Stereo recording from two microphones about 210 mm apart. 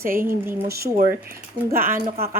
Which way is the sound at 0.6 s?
45° right (ahead or behind).